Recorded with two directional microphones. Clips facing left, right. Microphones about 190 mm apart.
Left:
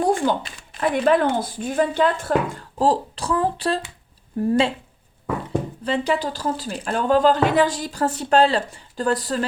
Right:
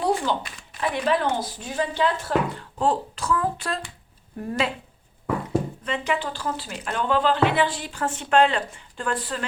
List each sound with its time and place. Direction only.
0.0 s a sound: 50° left (ahead or behind)
0.8 s speech: 50° left (ahead or behind); by 4.7 s 30° left (ahead or behind)
5.8 s speech: 35° left (ahead or behind)